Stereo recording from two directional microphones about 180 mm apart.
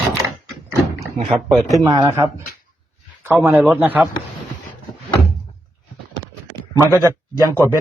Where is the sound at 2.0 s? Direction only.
15° right (ahead or behind).